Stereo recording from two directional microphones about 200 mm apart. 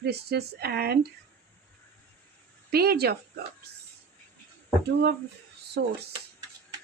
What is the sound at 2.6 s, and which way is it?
Speech, 50° right (ahead or behind).